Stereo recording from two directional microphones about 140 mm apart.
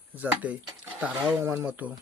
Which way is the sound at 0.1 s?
10° right (ahead or behind).